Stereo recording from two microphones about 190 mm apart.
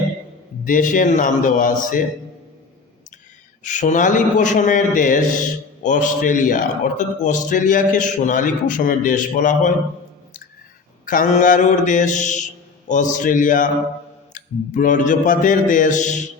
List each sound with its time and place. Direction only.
0.6 s a man's voice: 45° left (ahead or behind)
3.6 s a man's voice: 40° left (ahead or behind)
11.0 s mantra: 45° left (ahead or behind)
12.9 s a man's voice: 40° left (ahead or behind)